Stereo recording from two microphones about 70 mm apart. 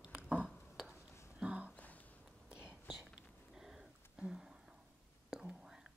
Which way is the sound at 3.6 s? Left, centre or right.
Centre.